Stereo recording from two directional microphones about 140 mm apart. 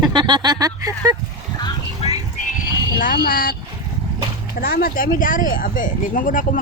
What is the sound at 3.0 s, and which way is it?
Speech, 80° left.